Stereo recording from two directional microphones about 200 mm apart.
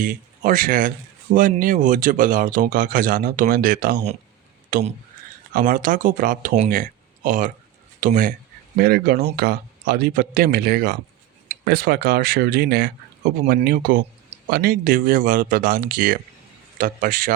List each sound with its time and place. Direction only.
0.0 s speech: 45° right (ahead or behind)
13.4 s speech: 40° right (ahead or behind)